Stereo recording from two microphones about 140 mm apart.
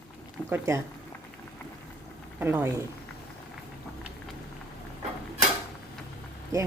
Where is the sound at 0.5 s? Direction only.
20° right (ahead or behind).